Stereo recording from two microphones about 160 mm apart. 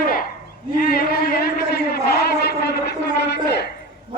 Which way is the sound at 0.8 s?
70° left (ahead or behind).